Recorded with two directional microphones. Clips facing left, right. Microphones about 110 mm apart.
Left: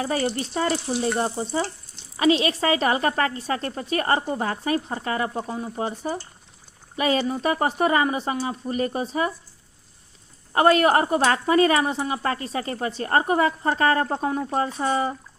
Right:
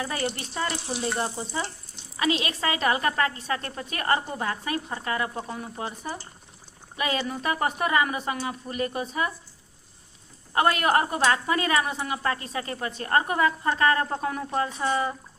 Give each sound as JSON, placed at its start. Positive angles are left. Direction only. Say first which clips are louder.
{"t": 0.0, "sound": "a woman's voice", "louder": "left 5 dB", "side_deg": 30}
{"t": 10.5, "sound": "a woman's voice", "louder": "left 5 dB", "side_deg": 30}